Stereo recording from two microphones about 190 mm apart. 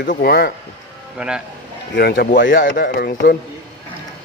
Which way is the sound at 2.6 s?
45° left (ahead or behind).